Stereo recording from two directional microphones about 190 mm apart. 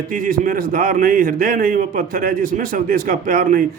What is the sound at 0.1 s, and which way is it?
A man's voice, 45° right (ahead or behind).